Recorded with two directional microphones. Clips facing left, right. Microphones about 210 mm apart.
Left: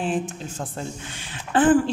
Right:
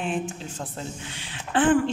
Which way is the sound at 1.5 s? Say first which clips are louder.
Left 3 dB; 40° left (ahead or behind).